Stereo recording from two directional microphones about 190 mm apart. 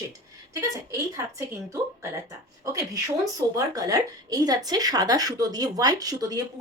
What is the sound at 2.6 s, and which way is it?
A woman's voice, 15° right (ahead or behind).